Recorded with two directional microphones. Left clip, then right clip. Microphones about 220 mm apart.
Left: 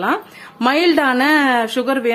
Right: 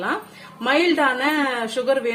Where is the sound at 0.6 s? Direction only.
50° left (ahead or behind).